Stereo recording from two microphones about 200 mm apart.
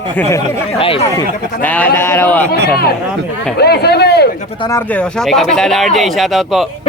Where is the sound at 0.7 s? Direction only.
30° left (ahead or behind).